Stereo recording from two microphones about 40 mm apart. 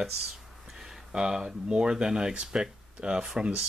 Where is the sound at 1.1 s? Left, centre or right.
Centre.